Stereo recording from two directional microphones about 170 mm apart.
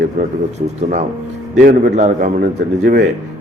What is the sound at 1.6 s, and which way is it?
Speech, 60° right (ahead or behind).